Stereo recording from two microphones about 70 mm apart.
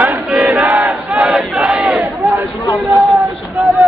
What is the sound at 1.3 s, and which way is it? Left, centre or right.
Battle cry, centre.